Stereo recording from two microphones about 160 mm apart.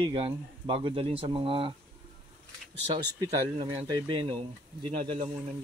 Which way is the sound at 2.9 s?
25° right (ahead or behind).